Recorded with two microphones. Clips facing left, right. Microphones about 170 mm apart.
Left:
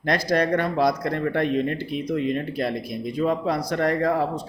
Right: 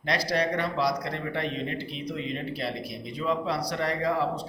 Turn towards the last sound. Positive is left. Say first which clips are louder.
# left 4 dB
turn(degrees=50)  # may be behind; listen again after turning